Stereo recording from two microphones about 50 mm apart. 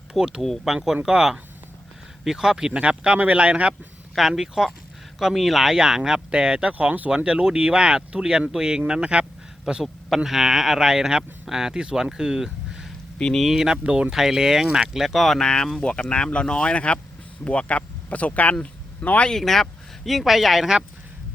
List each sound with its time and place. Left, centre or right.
0.1 s speech: centre
4.1 s speech: centre; by 7.1 s right
7.3 s speech: centre
9.7 s speech: centre
13.8 s speech: right
14.1 s speech: centre
15.4 s speech: centre
19.3 s speech: centre